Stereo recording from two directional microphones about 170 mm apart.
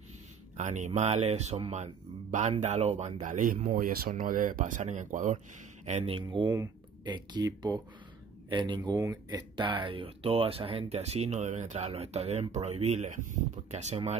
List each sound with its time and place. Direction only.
0.6 s speech: 45° right (ahead or behind)
6.3 s speech: 20° right (ahead or behind); by 14.1 s 40° right (ahead or behind)